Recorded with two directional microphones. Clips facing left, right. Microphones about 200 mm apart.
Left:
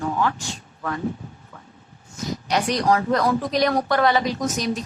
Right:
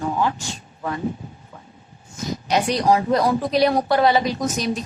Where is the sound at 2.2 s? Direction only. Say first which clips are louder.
Right 2 dB; 20° right (ahead or behind).